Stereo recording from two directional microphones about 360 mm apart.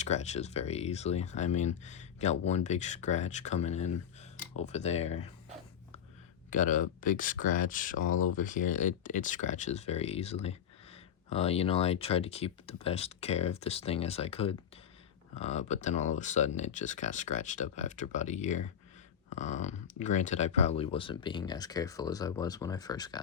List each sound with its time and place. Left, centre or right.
0.0 s speech: centre
6.5 s speech: left